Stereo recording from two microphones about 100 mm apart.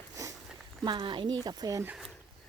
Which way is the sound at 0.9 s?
55° right (ahead or behind).